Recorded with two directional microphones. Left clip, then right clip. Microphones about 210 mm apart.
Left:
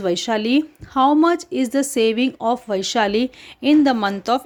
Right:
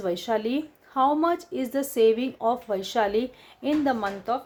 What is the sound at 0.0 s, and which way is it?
Speech, 40° left (ahead or behind).